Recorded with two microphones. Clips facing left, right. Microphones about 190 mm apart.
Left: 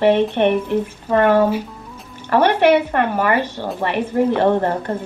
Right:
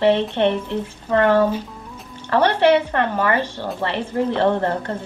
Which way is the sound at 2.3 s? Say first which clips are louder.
Left 2 dB; 10° left (ahead or behind).